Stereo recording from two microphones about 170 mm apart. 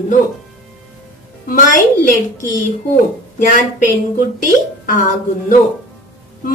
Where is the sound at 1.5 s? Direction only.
50° left (ahead or behind).